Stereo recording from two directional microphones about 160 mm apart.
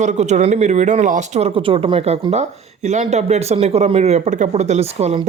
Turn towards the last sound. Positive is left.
turn(degrees=-40)  # may be behind; listen again after turning